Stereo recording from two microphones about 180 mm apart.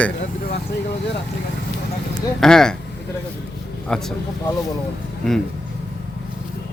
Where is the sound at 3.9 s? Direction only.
5° left (ahead or behind).